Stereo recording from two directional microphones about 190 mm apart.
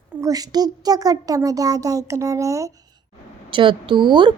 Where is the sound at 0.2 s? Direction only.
20° right (ahead or behind).